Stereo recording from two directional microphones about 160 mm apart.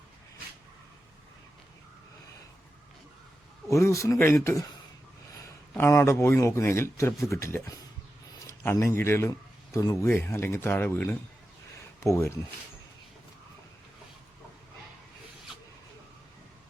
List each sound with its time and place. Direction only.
3.7 s speech: 20° left (ahead or behind)
5.7 s a man's voice: 15° left (ahead or behind)